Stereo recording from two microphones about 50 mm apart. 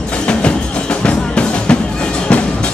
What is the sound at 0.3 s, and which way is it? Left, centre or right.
Music, left.